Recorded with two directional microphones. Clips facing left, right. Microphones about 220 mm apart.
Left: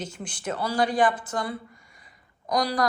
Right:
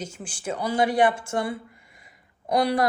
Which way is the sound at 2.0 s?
25° right (ahead or behind).